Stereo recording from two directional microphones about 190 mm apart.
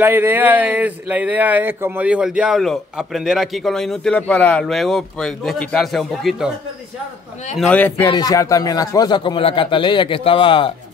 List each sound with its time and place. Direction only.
0.0 s speech: 10° right (ahead or behind)
7.5 s a man's voice: 5° left (ahead or behind)
8.1 s speech: 20° left (ahead or behind)